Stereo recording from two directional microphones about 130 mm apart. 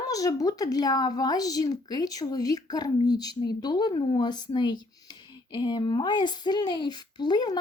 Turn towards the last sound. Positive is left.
turn(degrees=30)  # may be behind; listen again after turning